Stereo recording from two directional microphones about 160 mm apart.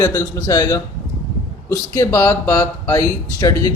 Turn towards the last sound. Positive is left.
turn(degrees=20)  # may be behind; listen again after turning